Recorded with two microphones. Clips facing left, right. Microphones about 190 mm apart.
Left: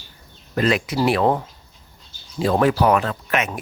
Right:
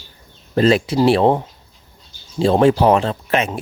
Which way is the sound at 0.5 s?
30° right (ahead or behind).